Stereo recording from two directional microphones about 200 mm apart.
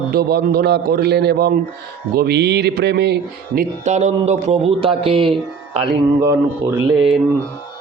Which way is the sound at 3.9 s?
35° right (ahead or behind).